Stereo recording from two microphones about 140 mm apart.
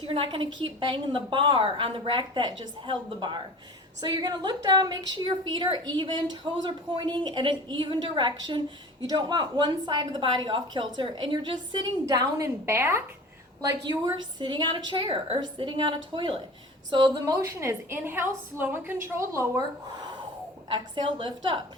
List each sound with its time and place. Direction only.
0.0 s a woman's voice: 40° right (ahead or behind); by 13.0 s 20° right (ahead or behind)
13.6 s a woman's voice: 30° right (ahead or behind)
20.7 s a woman's voice: 35° right (ahead or behind)